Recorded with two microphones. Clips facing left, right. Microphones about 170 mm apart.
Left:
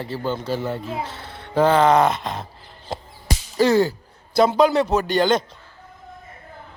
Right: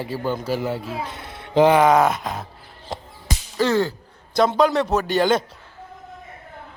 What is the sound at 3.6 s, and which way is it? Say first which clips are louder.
Slap: left 3 dB; 10° left (ahead or behind).